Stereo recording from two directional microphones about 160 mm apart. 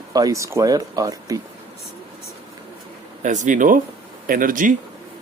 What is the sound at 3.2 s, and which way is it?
Speech, 50° right (ahead or behind).